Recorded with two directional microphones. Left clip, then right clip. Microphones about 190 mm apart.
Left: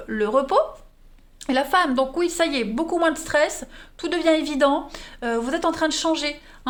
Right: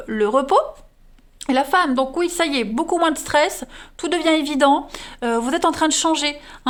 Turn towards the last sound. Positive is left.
turn(degrees=-40)  # may be behind; listen again after turning